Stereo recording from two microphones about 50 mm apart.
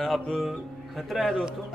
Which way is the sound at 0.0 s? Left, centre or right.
Centre.